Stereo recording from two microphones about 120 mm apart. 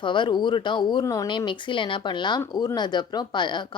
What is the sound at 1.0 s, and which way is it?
Speech, 30° left (ahead or behind).